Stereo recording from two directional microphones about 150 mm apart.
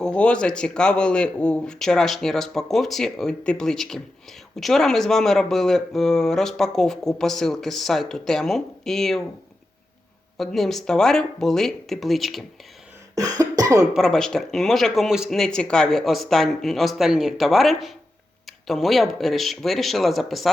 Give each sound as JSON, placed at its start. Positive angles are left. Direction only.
{"t": 0.0, "sound": "speech", "side_deg": 5}
{"t": 10.3, "sound": "speech", "side_deg": 0}
{"t": 13.1, "sound": "cough", "side_deg": -25}
{"t": 13.9, "sound": "speech", "side_deg": 5}